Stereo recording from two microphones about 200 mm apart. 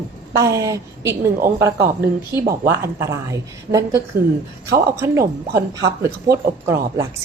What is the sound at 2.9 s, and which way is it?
Speech, 15° right (ahead or behind).